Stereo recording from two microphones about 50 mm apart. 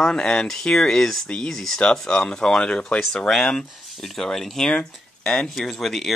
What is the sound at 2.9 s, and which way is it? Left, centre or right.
Speech, centre.